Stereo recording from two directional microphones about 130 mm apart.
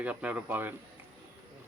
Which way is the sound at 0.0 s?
10° right (ahead or behind).